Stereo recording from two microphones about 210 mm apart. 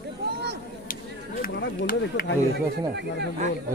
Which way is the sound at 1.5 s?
50° left (ahead or behind).